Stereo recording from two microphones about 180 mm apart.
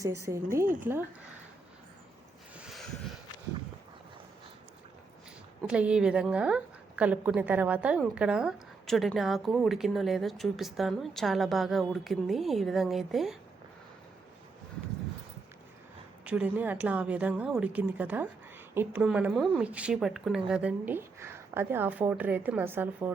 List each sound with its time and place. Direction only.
0.0 s speech: 15° right (ahead or behind)
2.6 s a sound: centre (ahead or behind)
5.6 s a woman's voice: 5° right (ahead or behind)
16.2 s a woman's voice: 5° right (ahead or behind)